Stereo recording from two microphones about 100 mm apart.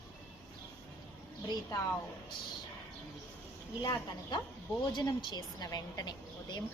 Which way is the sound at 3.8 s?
45° left (ahead or behind).